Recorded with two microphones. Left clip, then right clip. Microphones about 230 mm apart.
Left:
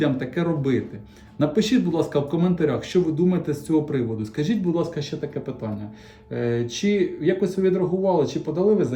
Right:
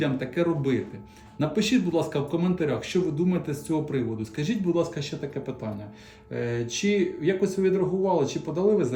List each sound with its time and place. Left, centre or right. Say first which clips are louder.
0.0 s speech: left 2 dB; centre